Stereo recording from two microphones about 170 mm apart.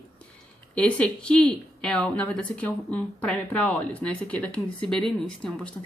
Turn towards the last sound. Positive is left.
turn(degrees=5)  # may be behind; listen again after turning